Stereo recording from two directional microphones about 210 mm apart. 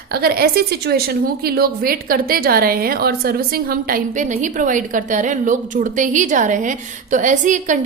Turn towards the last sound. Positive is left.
turn(degrees=-35)  # may be behind; listen again after turning